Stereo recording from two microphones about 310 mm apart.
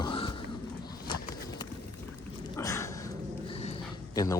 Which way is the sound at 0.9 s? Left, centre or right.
Centre.